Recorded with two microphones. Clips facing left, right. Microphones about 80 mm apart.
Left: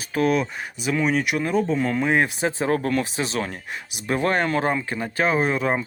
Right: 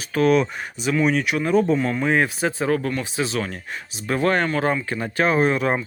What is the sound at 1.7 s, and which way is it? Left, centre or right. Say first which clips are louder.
Speech: right 1 dB; left.